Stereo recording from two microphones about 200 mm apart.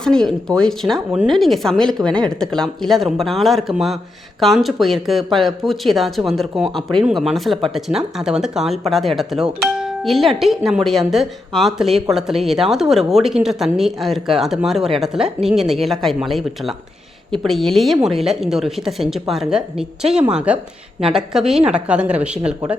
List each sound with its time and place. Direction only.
0.0 s speech: 5° left (ahead or behind)